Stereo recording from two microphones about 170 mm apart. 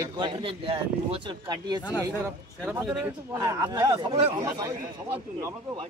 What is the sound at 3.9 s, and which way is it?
Speech, 35° right (ahead or behind).